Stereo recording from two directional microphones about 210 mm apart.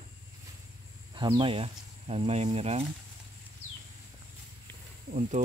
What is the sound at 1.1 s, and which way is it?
Speech, 25° right (ahead or behind).